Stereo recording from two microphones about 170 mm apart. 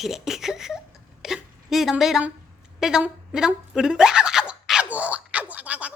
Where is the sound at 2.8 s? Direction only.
5° right (ahead or behind).